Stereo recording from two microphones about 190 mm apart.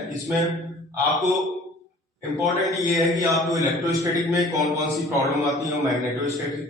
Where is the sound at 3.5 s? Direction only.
20° right (ahead or behind).